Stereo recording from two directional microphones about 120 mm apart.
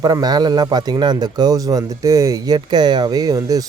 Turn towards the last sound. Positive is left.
turn(degrees=-30)  # may be behind; listen again after turning